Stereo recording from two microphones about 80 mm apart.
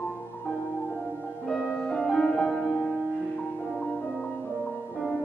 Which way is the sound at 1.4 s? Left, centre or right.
Centre.